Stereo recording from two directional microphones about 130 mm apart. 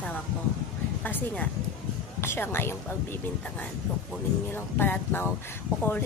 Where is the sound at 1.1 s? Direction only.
15° left (ahead or behind).